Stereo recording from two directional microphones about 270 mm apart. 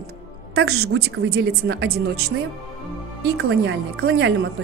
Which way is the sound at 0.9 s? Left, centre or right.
Right.